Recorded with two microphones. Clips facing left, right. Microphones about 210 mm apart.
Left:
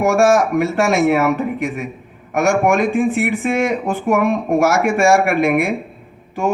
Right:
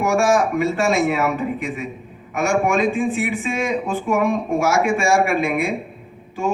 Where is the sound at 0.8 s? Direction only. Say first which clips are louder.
Left 5 dB; 65° left (ahead or behind).